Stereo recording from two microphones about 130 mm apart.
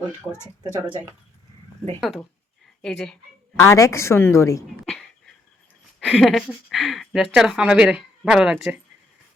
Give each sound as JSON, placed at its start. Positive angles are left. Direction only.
{"t": 2.0, "sound": "speech", "side_deg": 0}
{"t": 3.6, "sound": "a woman's voice", "side_deg": 25}
{"t": 6.1, "sound": "speech", "side_deg": 0}